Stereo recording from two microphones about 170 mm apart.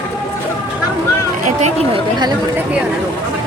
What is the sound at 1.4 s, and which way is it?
Speech, 40° right (ahead or behind).